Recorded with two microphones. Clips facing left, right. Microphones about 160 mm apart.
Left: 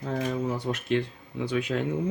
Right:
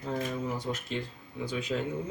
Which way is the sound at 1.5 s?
65° left (ahead or behind).